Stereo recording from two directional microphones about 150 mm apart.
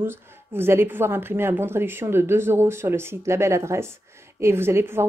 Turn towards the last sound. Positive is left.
turn(degrees=-15)  # may be behind; listen again after turning